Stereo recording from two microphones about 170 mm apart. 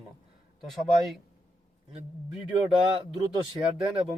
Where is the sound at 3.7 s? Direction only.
5° right (ahead or behind).